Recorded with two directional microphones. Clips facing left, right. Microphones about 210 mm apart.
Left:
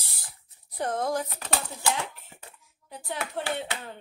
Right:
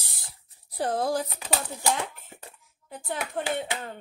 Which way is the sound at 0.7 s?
35° right (ahead or behind).